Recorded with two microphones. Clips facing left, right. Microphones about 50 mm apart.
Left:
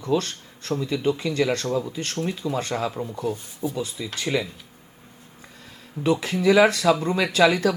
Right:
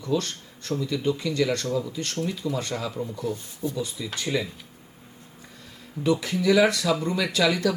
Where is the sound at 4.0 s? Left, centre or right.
Left.